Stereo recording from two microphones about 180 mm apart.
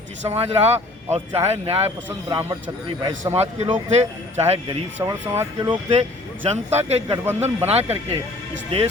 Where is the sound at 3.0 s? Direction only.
25° right (ahead or behind).